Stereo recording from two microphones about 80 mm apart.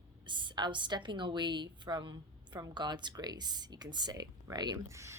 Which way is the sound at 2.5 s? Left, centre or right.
Right.